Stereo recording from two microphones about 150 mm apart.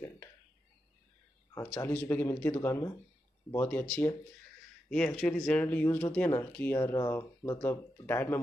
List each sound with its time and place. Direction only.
1.7 s speech: 10° left (ahead or behind)
4.8 s speech: 5° left (ahead or behind)